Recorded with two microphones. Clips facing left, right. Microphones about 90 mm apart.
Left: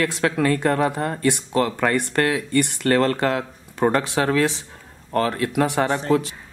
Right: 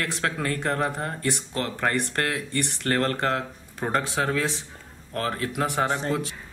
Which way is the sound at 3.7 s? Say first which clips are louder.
Left 6 dB; 75° left (ahead or behind).